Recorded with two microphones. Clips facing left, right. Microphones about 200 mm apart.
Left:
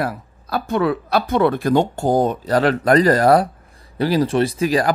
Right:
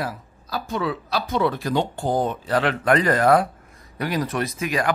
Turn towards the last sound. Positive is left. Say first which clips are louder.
# left 6 dB
turn(degrees=35)  # may be behind; listen again after turning